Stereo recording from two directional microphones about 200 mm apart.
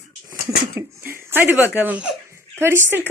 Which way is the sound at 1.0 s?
10° right (ahead or behind).